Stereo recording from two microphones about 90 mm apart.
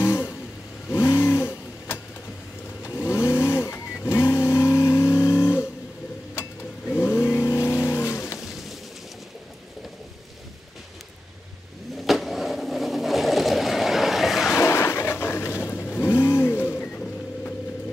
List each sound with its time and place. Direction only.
0.0 s vehicle: 30° left (ahead or behind)
6.9 s vehicle: 25° left (ahead or behind)
12.0 s vehicle: centre (ahead or behind)
14.5 s vehicle: 30° left (ahead or behind)
16.2 s a sound: 30° left (ahead or behind)
16.8 s a sound: 10° left (ahead or behind)